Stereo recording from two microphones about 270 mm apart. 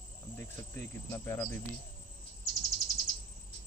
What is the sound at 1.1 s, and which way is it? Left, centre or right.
Speech, centre.